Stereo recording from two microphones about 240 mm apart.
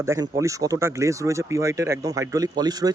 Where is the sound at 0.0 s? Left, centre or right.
Centre.